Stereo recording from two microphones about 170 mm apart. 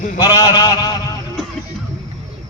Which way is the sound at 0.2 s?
25° left (ahead or behind).